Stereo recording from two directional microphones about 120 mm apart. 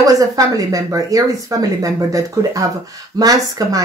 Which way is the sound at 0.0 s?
30° right (ahead or behind).